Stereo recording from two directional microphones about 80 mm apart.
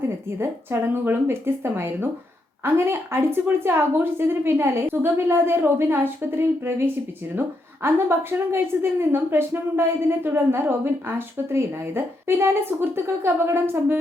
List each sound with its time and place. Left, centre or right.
0.3 s a woman's voice: right